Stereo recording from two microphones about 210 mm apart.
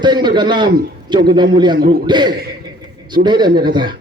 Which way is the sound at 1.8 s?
45° right (ahead or behind).